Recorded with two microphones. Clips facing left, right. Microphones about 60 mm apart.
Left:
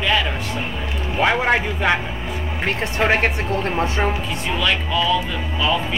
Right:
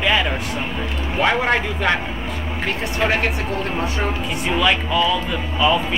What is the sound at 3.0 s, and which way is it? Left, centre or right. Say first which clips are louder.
Speech: left 2 dB; left.